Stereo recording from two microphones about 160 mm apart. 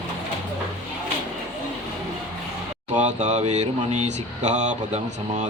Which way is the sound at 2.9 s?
45° right (ahead or behind).